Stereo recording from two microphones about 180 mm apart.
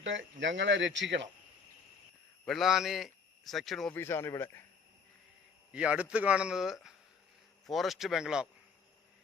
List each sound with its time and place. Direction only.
0.0 s speech: 90° right
2.4 s speech: centre (ahead or behind)
3.9 s speech: 15° left (ahead or behind)
5.7 s speech: 5° right (ahead or behind)